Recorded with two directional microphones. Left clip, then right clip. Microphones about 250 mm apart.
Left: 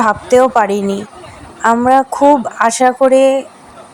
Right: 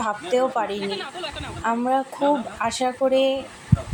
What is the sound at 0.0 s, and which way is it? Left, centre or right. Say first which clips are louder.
Speech: left 12 dB; left.